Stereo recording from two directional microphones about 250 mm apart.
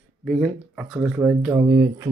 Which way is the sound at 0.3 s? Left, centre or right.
Centre.